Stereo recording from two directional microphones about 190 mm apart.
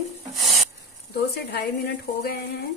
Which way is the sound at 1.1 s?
55° left (ahead or behind).